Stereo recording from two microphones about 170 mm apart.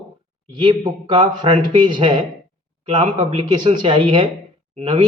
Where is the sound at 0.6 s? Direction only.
25° right (ahead or behind).